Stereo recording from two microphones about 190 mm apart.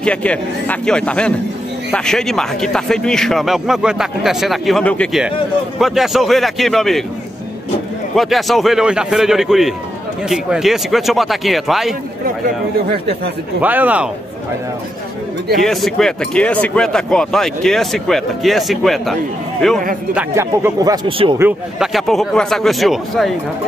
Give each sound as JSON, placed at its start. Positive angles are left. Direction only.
{"t": 0.0, "sound": "speech", "side_deg": 5}
{"t": 8.2, "sound": "speech", "side_deg": 0}
{"t": 13.6, "sound": "speech", "side_deg": -10}
{"t": 15.5, "sound": "speech", "side_deg": 0}
{"t": 20.2, "sound": "speech", "side_deg": -15}
{"t": 21.4, "sound": "speech", "side_deg": -5}